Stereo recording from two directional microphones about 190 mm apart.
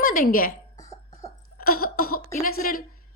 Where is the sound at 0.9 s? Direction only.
35° left (ahead or behind).